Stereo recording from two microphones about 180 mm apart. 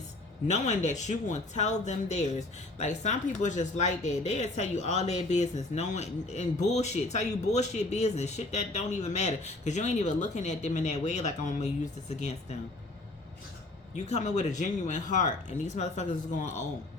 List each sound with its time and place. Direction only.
0.4 s speech: 40° left (ahead or behind)
13.9 s speech: 40° left (ahead or behind)